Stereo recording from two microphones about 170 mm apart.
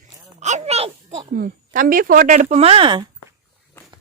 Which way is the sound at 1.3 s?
55° right (ahead or behind).